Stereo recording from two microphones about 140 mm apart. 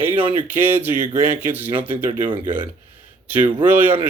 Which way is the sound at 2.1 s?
40° right (ahead or behind).